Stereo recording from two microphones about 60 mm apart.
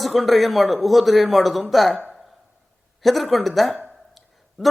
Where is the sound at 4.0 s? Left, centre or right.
Centre.